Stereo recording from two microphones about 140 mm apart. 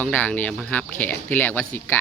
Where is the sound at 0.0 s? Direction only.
10° left (ahead or behind).